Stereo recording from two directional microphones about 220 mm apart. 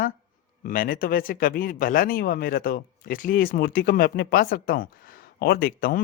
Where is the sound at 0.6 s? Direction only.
40° left (ahead or behind).